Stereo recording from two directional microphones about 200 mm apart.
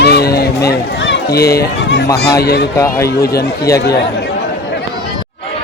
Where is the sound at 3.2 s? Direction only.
50° left (ahead or behind).